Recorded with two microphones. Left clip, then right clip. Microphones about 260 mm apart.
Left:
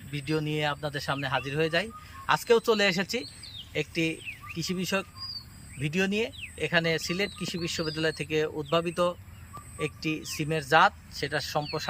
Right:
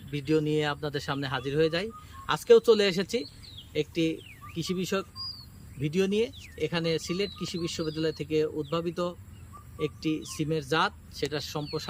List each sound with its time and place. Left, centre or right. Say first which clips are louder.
0.1 s speech: right 4 dB; centre
8.4 s speech: left 3 dB; centre
8.9 s speech: left 5 dB; centre